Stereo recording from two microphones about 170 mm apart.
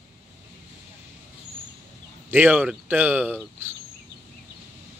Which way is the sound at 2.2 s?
10° right (ahead or behind).